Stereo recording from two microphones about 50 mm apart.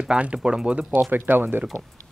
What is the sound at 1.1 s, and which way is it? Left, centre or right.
Speech, right.